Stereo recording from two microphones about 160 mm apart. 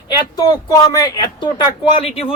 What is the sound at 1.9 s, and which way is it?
Speech, 40° left (ahead or behind).